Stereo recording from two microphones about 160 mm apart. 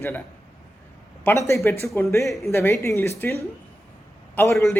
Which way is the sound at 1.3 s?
10° left (ahead or behind).